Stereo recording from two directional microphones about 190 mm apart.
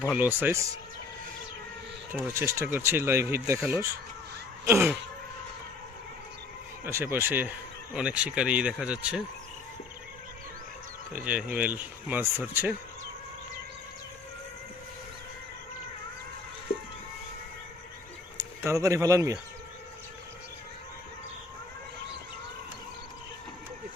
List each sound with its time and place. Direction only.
0.2 s speech: 10° right (ahead or behind)
2.1 s speech: 10° right (ahead or behind)
6.8 s speech: 10° right (ahead or behind)
11.1 s speech: 5° right (ahead or behind)
16.7 s a sound: 30° left (ahead or behind)
18.3 s speech: 15° right (ahead or behind)